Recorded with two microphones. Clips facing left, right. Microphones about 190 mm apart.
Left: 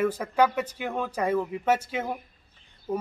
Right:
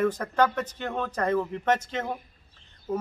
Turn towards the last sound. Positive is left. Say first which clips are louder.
# even
turn(degrees=10)  # may be behind; listen again after turning